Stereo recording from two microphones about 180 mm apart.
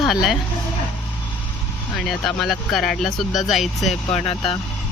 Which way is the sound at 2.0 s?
Centre (ahead or behind).